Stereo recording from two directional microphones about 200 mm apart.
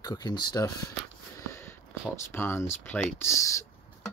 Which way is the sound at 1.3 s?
15° left (ahead or behind).